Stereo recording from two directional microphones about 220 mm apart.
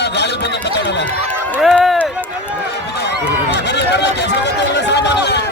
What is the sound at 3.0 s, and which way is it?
Run, 50° left (ahead or behind).